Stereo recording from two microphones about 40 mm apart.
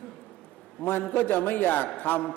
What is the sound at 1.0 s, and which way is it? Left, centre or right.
A man's voice, left.